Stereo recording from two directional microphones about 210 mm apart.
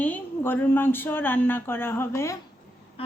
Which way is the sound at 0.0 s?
10° left (ahead or behind).